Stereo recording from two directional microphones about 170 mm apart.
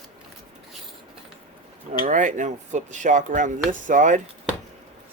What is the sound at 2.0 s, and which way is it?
Speech, 45° right (ahead or behind).